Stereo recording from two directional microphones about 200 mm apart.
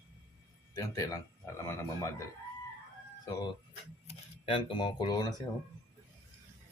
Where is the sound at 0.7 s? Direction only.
15° left (ahead or behind).